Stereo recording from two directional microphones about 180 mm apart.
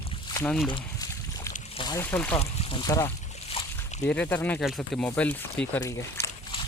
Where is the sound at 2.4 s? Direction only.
25° left (ahead or behind).